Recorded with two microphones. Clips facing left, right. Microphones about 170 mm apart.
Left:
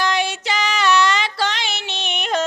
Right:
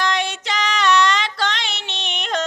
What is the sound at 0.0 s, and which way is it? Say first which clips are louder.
Female singing: left 1 dB; 5° left (ahead or behind).